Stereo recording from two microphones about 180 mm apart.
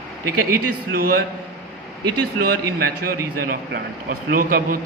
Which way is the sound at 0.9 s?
55° right (ahead or behind).